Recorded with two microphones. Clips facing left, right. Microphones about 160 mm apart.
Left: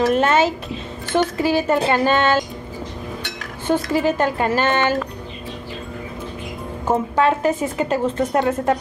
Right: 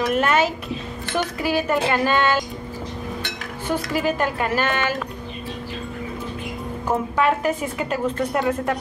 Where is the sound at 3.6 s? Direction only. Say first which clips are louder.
Left 4 dB; 25° left (ahead or behind).